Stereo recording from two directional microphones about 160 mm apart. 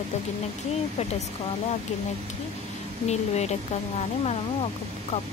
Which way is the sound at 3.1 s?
45° left (ahead or behind).